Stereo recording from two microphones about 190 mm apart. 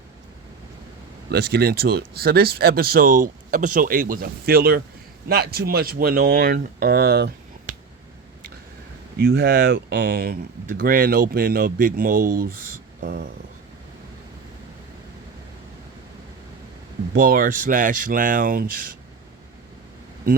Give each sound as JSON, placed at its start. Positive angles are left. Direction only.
{"t": 1.3, "sound": "speech", "side_deg": -55}
{"t": 9.1, "sound": "speech", "side_deg": -55}
{"t": 13.0, "sound": "a sound", "side_deg": -60}
{"t": 17.2, "sound": "speech", "side_deg": -50}